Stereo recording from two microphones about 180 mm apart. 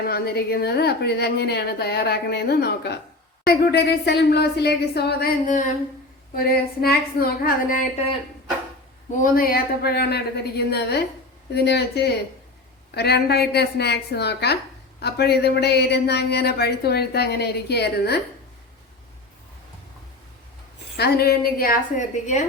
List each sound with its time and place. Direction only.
0.1 s speech: 60° left (ahead or behind)
6.3 s speech: 55° left (ahead or behind)
9.1 s speech: 50° left (ahead or behind)
20.9 s a woman's voice: 60° left (ahead or behind); by 22.4 s 40° left (ahead or behind)